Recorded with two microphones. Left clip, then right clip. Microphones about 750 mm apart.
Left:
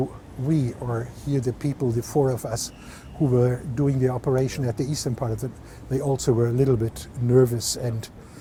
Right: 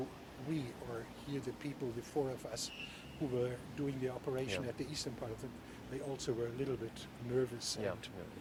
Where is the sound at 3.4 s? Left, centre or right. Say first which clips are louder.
Left 15 dB; left.